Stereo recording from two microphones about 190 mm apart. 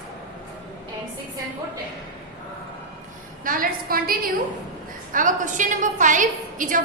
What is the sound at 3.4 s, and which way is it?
A woman's voice, 50° right (ahead or behind).